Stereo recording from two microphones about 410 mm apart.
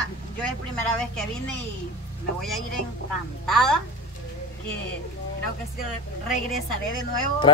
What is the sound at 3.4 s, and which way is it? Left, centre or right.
Speech, centre.